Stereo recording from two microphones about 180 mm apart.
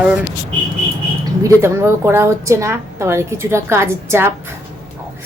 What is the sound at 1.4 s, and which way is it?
Speech, 15° right (ahead or behind).